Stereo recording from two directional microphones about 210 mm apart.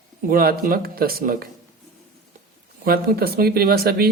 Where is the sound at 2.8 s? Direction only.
45° right (ahead or behind).